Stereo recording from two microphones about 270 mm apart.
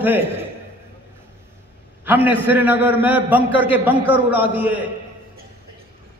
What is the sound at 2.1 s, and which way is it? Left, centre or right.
A man's voice, centre.